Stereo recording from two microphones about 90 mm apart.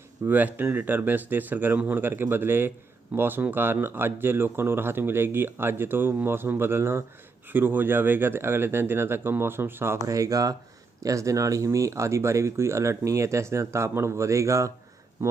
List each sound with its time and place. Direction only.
0.3 s speech: 20° right (ahead or behind)
10.2 s speech: 40° right (ahead or behind)